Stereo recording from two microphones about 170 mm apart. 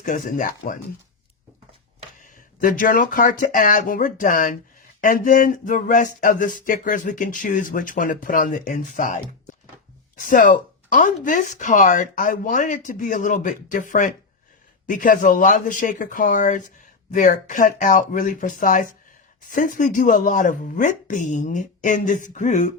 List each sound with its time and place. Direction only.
0.0 s speech: 50° left (ahead or behind)
2.2 s speech: 50° left (ahead or behind)
14.8 s speech: 50° left (ahead or behind)